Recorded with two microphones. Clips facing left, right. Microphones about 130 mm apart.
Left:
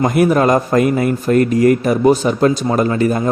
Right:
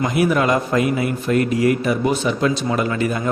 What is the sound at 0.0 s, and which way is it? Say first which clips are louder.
A man's voice: left 5 dB; 45° left (ahead or behind).